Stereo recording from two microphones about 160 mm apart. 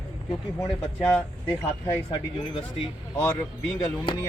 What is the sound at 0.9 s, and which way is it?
Speech, 10° left (ahead or behind).